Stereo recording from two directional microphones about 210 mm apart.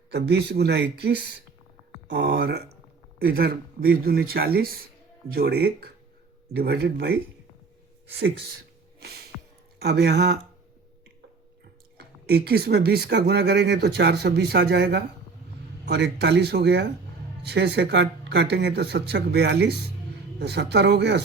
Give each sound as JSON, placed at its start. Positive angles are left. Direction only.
{"t": 0.1, "sound": "speech", "side_deg": -50}
{"t": 9.8, "sound": "speech", "side_deg": -50}
{"t": 11.9, "sound": "speech", "side_deg": -50}